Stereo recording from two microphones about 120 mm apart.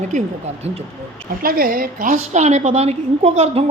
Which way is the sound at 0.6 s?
65° right (ahead or behind).